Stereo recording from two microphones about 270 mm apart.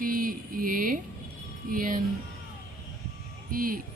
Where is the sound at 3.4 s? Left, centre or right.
Right.